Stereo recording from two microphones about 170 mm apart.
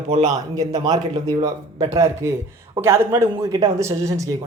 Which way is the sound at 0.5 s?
20° right (ahead or behind).